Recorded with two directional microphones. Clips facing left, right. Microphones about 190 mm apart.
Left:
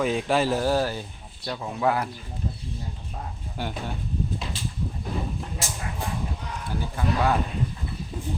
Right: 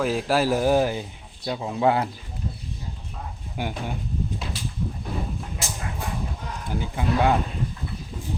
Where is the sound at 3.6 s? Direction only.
15° right (ahead or behind).